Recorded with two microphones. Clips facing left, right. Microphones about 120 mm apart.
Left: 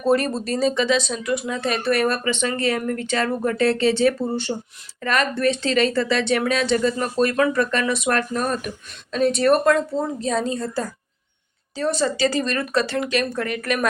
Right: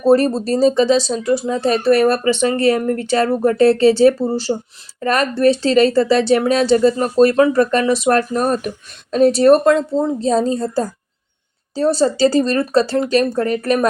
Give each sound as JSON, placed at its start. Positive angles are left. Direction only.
{"t": 0.0, "sound": "speech", "side_deg": -35}